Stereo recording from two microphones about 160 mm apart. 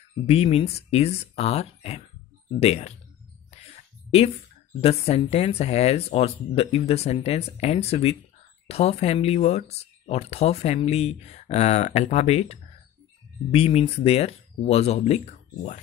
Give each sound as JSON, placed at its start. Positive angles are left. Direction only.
{"t": 0.3, "sound": "speech", "side_deg": 40}
{"t": 4.7, "sound": "speech", "side_deg": 40}